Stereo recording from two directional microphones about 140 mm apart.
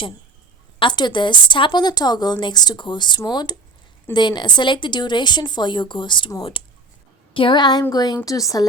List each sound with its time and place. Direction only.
0.8 s a woman's voice: 35° left (ahead or behind)